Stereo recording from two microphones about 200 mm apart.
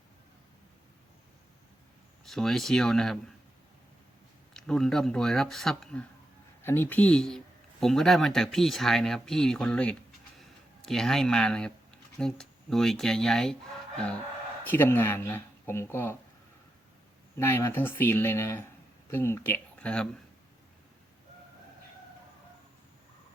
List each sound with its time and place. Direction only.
2.2 s speech: centre (ahead or behind)
4.5 s speech: centre (ahead or behind)
14.6 s speech: 10° left (ahead or behind)
17.3 s speech: 10° left (ahead or behind)